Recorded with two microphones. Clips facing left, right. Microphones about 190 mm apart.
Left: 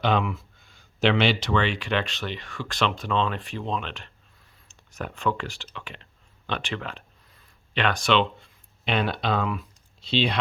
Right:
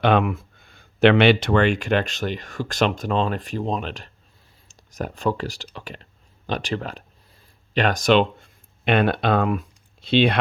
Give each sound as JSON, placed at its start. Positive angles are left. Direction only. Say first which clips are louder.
{"t": 0.0, "sound": "speech", "louder": "right 5 dB", "side_deg": -55}